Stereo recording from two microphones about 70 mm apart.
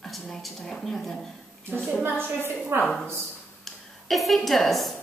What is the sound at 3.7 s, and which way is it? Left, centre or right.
Speech, centre.